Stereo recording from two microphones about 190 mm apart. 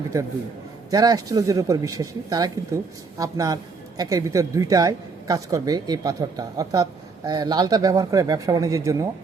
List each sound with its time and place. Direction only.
0.9 s speech: 20° right (ahead or behind)